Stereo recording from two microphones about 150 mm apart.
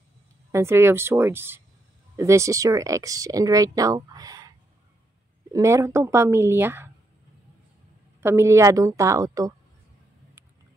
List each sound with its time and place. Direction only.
0.5 s a woman's voice: 20° right (ahead or behind)
8.2 s speech: 15° right (ahead or behind)